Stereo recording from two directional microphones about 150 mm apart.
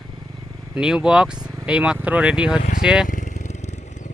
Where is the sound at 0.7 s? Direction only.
5° right (ahead or behind).